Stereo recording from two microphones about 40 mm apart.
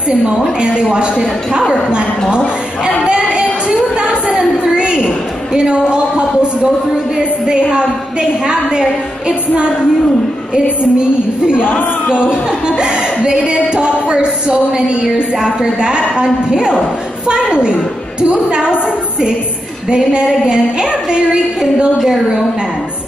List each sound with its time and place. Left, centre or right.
1.7 s music: right
3.1 s music: right
4.4 s a sound: centre
7.2 s a woman's voice: centre
10.5 s music: right
11.5 s speech: left
12.3 s a woman's voice: centre
13.7 s music: right
15.3 s a woman's voice: centre
17.3 s music: right
20.4 s music: centre
21.9 s a woman's voice: centre